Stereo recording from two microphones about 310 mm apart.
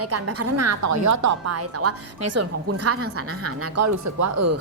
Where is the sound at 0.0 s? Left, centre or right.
Right.